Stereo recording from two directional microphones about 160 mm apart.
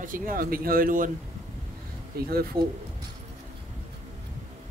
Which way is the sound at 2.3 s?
70° right (ahead or behind).